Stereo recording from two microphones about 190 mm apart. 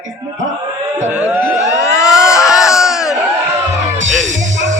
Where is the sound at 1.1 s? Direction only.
10° right (ahead or behind).